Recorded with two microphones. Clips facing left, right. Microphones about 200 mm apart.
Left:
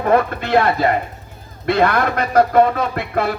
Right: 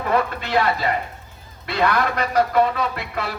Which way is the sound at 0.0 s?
50° left (ahead or behind).